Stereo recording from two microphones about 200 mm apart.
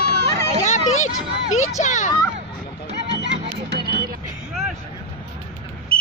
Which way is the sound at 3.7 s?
55° right (ahead or behind).